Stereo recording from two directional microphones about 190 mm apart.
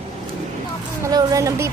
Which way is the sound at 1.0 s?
20° right (ahead or behind).